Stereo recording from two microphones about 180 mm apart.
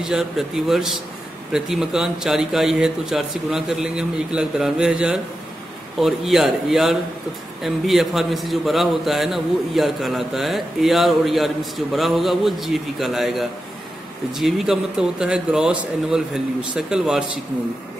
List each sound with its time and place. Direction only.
0.0 s a man's voice: 5° right (ahead or behind)